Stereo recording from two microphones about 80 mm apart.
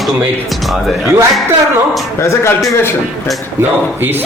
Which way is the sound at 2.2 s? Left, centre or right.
Left.